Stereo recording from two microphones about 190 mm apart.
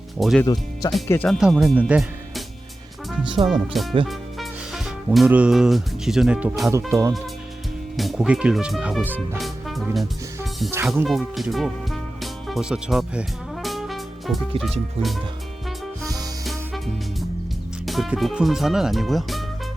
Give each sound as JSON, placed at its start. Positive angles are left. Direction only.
{"t": 0.2, "sound": "speech", "side_deg": 0}
{"t": 0.4, "sound": "speech", "side_deg": 20}
{"t": 1.3, "sound": "speech", "side_deg": 0}
{"t": 3.2, "sound": "speech", "side_deg": -25}
{"t": 3.5, "sound": "speech", "side_deg": 0}
{"t": 7.9, "sound": "speech", "side_deg": 0}
{"t": 9.4, "sound": "music", "side_deg": 0}
{"t": 14.6, "sound": "speech", "side_deg": 0}
{"t": 16.0, "sound": "music", "side_deg": -20}
{"t": 16.4, "sound": "music", "side_deg": 0}
{"t": 17.8, "sound": "speech", "side_deg": 0}